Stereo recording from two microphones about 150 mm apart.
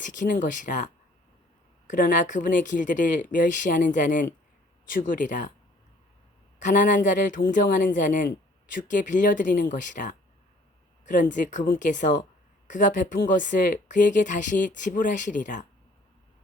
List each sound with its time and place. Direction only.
0.0 s speech: 55° left (ahead or behind)
1.9 s speech: 60° left (ahead or behind)
6.6 s speech: 55° left (ahead or behind)